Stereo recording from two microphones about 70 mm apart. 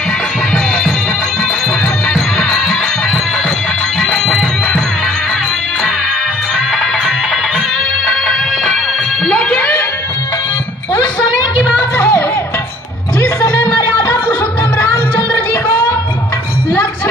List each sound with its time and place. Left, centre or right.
2.1 s music: centre
4.0 s music: centre
6.7 s music: centre
9.3 s a sound: centre
12.0 s music: left